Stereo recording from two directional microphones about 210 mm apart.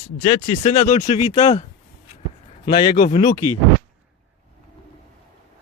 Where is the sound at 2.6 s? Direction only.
20° left (ahead or behind).